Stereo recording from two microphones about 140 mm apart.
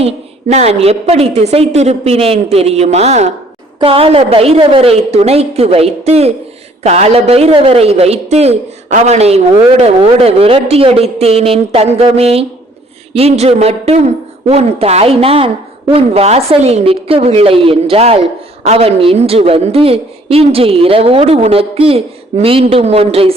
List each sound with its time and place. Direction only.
0.0 s a woman's voice: 55° right (ahead or behind)
3.8 s a woman's voice: 40° right (ahead or behind)